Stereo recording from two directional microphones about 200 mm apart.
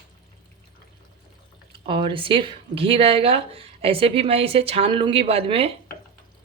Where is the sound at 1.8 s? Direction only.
25° right (ahead or behind).